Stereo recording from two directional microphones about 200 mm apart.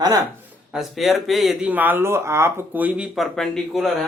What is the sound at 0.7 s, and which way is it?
Speech, centre (ahead or behind).